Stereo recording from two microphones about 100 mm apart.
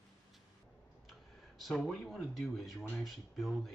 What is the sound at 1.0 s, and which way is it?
Speech, centre (ahead or behind).